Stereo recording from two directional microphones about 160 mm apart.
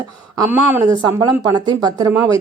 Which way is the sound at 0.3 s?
15° right (ahead or behind).